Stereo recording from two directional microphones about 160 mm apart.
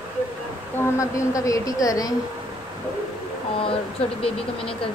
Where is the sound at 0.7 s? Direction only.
20° left (ahead or behind).